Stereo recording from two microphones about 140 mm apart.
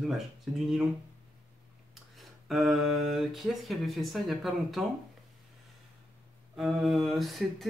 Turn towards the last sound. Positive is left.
turn(degrees=0)  # may be behind; listen again after turning